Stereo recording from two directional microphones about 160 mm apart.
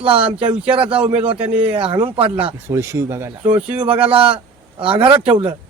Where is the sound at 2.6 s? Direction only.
15° right (ahead or behind).